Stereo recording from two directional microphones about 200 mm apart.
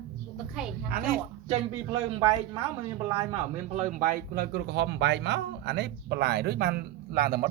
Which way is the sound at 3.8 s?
40° right (ahead or behind).